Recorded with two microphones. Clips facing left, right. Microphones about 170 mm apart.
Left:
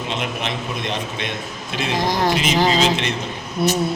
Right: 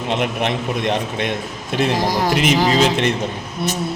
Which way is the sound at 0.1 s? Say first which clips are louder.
Right 8 dB; 55° right (ahead or behind).